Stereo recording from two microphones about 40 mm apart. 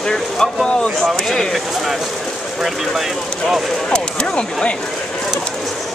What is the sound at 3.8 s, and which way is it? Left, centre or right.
Speech, left.